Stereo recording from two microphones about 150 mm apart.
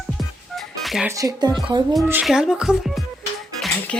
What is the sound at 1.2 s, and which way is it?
Speech, 25° right (ahead or behind).